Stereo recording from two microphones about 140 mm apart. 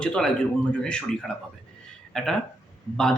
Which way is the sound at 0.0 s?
5° left (ahead or behind).